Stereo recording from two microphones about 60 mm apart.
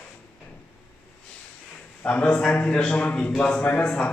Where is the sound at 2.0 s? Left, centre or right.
Left.